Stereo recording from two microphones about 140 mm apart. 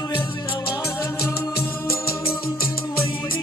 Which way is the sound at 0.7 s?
20° left (ahead or behind).